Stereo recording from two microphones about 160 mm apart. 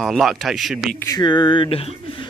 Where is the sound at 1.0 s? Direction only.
25° left (ahead or behind).